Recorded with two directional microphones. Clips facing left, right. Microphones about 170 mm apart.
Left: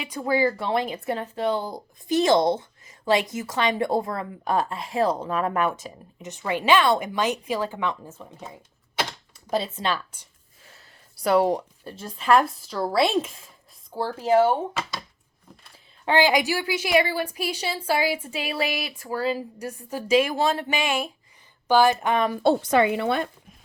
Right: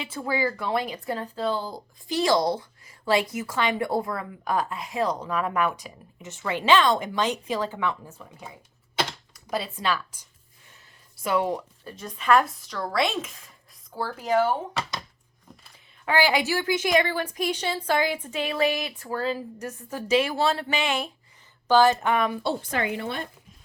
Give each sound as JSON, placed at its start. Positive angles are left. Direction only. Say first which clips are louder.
{"t": 0.0, "sound": "a woman's voice", "louder": "left 4 dB", "side_deg": 15}
{"t": 9.5, "sound": "a woman's voice", "louder": "left 2 dB", "side_deg": 25}
{"t": 11.1, "sound": "a woman's voice", "louder": "left 5 dB", "side_deg": 35}
{"t": 16.0, "sound": "a woman's voice", "louder": "left 2 dB", "side_deg": 20}
{"t": 23.0, "sound": "speech", "louder": "left 7 dB", "side_deg": 65}